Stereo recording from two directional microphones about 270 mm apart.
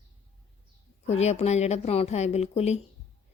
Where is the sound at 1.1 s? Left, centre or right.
Left.